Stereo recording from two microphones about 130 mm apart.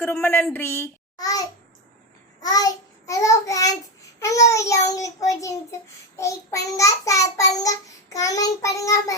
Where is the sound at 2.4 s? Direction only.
30° left (ahead or behind).